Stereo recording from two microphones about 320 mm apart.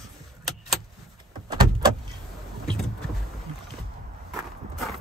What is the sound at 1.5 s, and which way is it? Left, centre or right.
Vehicle, centre.